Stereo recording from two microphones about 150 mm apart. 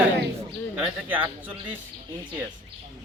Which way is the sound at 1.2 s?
35° right (ahead or behind).